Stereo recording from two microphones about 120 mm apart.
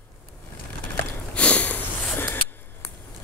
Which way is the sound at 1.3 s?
10° left (ahead or behind).